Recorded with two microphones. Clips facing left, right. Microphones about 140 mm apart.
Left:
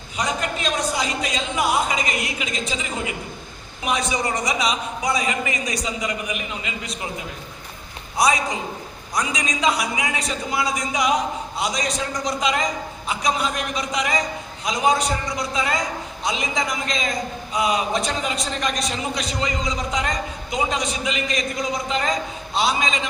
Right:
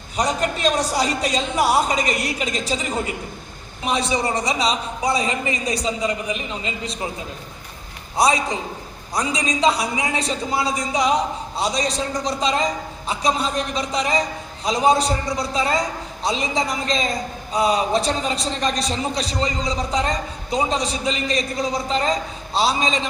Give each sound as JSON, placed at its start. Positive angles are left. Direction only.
{"t": 0.2, "sound": "a man's voice", "side_deg": -35}
{"t": 3.8, "sound": "a man's voice", "side_deg": -30}
{"t": 8.1, "sound": "a man's voice", "side_deg": -30}